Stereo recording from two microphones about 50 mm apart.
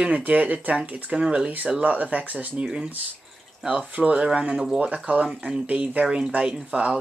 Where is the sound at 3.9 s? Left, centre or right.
Right.